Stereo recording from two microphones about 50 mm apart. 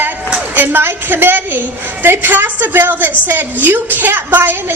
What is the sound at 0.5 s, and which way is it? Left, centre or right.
A woman's voice, right.